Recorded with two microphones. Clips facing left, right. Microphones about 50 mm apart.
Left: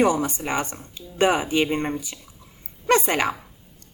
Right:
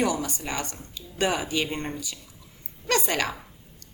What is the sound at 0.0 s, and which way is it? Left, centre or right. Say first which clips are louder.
A woman's voice: left 6 dB; left.